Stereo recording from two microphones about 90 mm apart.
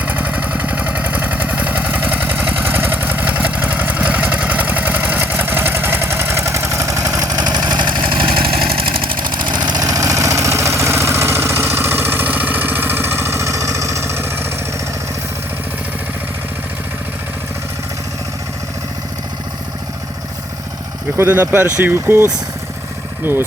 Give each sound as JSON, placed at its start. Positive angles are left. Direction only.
{"t": 0.0, "sound": "vehicle", "side_deg": -20}
{"t": 21.2, "sound": "speech", "side_deg": -25}